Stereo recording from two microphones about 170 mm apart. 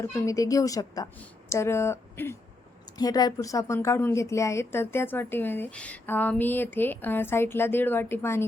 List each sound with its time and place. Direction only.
0.0 s a woman's voice: 20° left (ahead or behind)